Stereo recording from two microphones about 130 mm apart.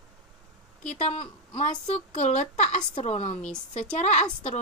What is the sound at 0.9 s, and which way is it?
A woman's voice, 60° left (ahead or behind).